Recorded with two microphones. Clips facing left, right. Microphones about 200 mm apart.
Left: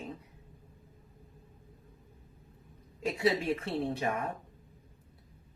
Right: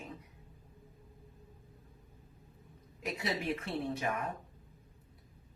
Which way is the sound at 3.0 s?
25° left (ahead or behind).